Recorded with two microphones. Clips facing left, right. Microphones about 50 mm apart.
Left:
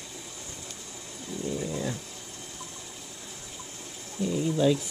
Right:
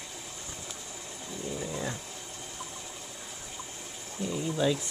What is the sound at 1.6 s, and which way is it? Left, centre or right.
Dog, centre.